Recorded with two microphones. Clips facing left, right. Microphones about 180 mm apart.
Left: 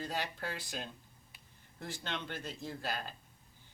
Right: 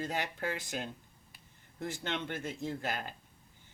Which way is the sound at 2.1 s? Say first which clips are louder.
Right 2 dB; 20° right (ahead or behind).